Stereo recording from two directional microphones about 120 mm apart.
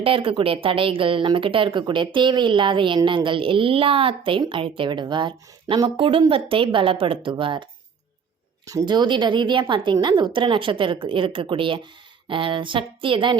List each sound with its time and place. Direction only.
0.0 s speech: 50° right (ahead or behind)
8.6 s speech: 35° right (ahead or behind)